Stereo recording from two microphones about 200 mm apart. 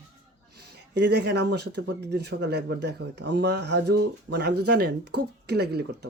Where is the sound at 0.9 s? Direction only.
55° right (ahead or behind).